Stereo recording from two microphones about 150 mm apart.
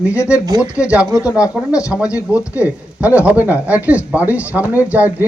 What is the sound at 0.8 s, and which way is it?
A man's voice, 10° right (ahead or behind).